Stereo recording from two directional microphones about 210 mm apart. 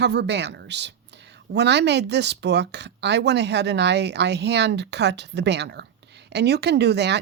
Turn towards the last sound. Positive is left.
turn(degrees=-55)  # may be behind; listen again after turning